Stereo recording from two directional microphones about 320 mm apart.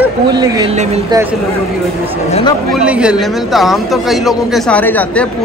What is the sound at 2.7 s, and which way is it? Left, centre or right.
Speech, centre.